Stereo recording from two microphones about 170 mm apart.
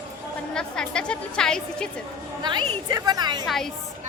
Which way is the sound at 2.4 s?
25° right (ahead or behind).